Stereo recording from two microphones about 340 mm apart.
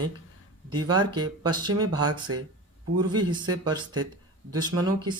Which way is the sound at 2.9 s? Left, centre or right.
Centre.